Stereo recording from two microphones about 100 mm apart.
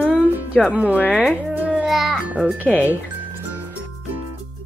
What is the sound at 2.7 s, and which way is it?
Speech, 15° left (ahead or behind).